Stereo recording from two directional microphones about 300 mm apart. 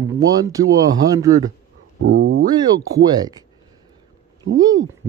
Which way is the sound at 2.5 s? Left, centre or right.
Centre.